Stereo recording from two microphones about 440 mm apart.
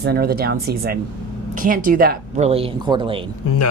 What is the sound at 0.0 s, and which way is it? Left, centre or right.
Speech, right.